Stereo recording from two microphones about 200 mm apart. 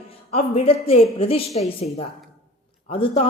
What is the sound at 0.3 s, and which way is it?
A woman's voice, 30° left (ahead or behind).